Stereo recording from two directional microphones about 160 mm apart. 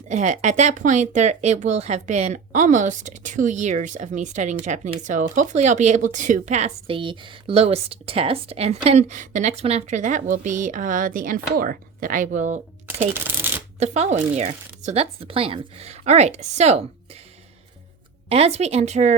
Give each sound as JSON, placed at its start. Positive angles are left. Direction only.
{"t": 0.1, "sound": "speech", "side_deg": -50}
{"t": 13.7, "sound": "speech", "side_deg": -45}
{"t": 18.3, "sound": "speech", "side_deg": -40}